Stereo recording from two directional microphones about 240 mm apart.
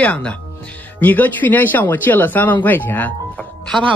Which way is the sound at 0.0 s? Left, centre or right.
Centre.